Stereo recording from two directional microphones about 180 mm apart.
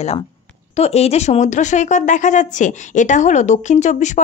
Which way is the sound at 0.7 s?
35° left (ahead or behind).